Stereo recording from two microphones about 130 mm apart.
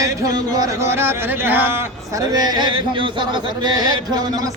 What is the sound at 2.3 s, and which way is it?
Speech, 30° right (ahead or behind).